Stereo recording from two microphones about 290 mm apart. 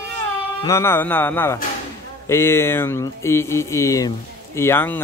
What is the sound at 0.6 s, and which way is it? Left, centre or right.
Speech, centre.